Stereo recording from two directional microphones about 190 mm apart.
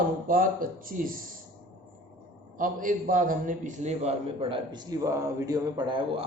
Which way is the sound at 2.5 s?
45° right (ahead or behind).